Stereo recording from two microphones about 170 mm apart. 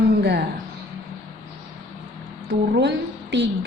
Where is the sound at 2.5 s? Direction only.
80° right.